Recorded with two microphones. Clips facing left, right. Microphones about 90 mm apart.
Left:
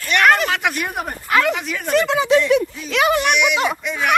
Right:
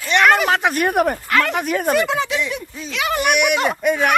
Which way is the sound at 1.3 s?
10° left (ahead or behind).